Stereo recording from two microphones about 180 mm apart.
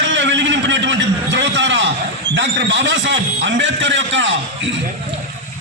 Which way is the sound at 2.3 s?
90° right.